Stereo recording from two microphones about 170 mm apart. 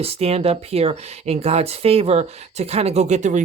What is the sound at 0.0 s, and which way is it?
Speech, 35° right (ahead or behind).